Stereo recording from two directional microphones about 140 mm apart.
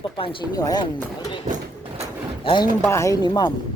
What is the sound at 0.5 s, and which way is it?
Speech, 25° left (ahead or behind).